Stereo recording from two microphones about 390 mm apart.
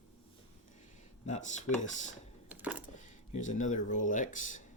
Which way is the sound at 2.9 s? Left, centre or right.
Centre.